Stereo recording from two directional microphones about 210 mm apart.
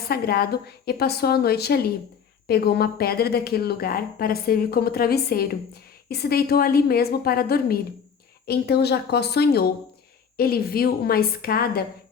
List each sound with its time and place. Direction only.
0.1 s speech: 45° left (ahead or behind)